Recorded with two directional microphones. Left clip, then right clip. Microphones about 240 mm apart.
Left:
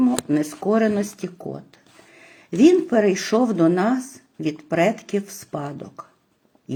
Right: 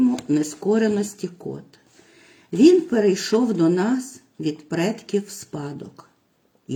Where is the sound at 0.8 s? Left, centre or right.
Left.